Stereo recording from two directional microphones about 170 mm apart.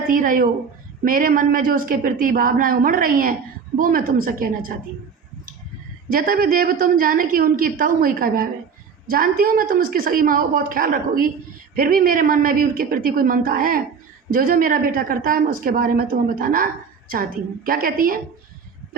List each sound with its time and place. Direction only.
0.1 s a woman's voice: 55° right (ahead or behind)
6.1 s a woman's voice: 60° right (ahead or behind)
17.7 s a woman's voice: 55° right (ahead or behind)